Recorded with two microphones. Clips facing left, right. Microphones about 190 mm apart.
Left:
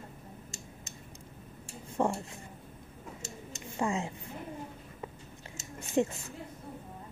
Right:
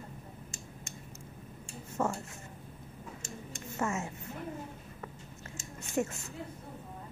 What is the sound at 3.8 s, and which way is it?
Speech, 15° left (ahead or behind).